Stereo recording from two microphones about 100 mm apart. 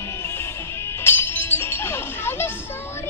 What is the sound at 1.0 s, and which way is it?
Chink, 20° left (ahead or behind).